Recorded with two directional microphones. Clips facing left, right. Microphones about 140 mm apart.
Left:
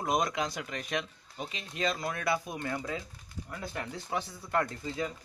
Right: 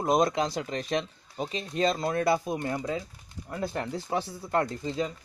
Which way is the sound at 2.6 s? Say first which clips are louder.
Right 4 dB; 20° right (ahead or behind).